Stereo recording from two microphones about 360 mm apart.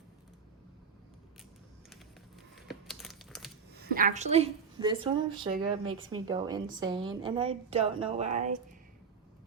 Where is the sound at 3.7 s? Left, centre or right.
Right.